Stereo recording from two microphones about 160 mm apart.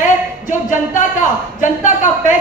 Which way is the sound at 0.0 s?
50° left (ahead or behind).